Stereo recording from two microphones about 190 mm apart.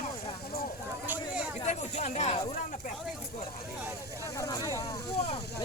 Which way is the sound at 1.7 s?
35° left (ahead or behind).